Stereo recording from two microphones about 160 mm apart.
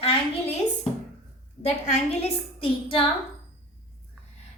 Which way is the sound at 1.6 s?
40° left (ahead or behind).